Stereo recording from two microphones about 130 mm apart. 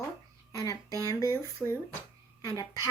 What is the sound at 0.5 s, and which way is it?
Speech, 25° left (ahead or behind).